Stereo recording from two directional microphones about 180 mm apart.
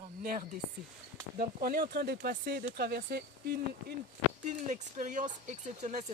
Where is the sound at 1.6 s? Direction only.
55° right (ahead or behind).